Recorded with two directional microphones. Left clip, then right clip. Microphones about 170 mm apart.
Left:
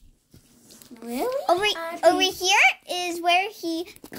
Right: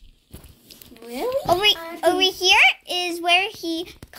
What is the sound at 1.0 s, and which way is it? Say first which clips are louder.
Speech: left 1 dB; 65° left (ahead or behind).